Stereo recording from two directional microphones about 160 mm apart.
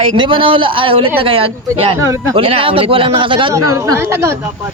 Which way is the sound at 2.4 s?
35° right (ahead or behind).